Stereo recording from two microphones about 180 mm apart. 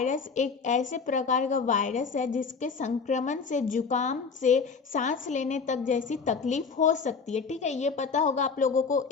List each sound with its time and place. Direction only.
0.0 s a woman's voice: 45° left (ahead or behind)